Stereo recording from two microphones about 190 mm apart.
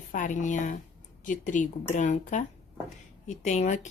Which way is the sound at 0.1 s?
40° left (ahead or behind).